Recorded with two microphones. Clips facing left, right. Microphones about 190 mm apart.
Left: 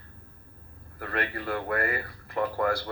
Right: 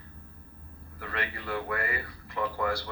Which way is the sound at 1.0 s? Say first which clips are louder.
Left 5 dB; 50° left (ahead or behind).